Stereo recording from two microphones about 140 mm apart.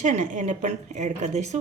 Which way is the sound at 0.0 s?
65° right (ahead or behind).